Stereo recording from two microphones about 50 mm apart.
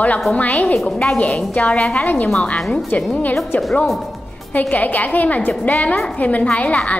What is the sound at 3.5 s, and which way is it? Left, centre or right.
Speech, left.